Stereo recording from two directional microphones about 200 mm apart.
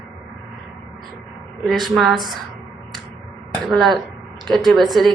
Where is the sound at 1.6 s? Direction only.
Centre (ahead or behind).